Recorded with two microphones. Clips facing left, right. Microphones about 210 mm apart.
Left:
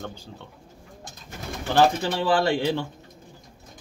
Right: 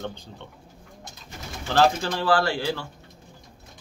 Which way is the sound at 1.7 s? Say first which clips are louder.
Left 1 dB; 15° left (ahead or behind).